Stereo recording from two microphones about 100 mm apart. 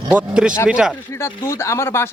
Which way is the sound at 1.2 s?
25° left (ahead or behind).